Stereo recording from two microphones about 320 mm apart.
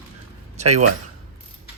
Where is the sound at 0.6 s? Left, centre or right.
Right.